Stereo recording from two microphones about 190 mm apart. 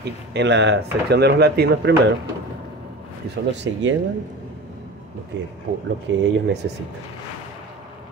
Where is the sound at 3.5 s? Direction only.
70° right (ahead or behind).